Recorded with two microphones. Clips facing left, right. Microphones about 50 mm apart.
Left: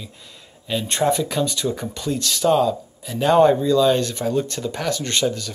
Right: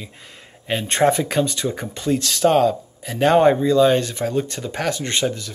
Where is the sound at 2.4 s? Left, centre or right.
Right.